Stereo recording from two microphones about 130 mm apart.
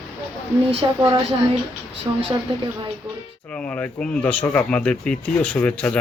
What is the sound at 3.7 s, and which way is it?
Speech, 10° left (ahead or behind).